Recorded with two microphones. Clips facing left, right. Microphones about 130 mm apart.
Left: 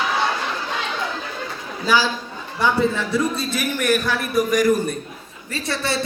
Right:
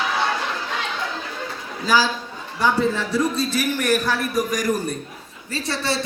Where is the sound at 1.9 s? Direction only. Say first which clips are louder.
Even; 40° right (ahead or behind).